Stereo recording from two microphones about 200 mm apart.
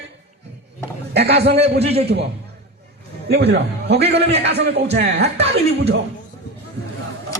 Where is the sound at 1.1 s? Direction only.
55° right (ahead or behind).